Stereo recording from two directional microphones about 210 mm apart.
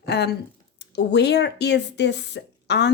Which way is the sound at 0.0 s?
50° left (ahead or behind).